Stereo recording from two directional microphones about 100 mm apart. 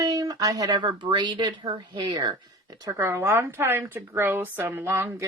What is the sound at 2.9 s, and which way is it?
A woman's voice, 25° right (ahead or behind).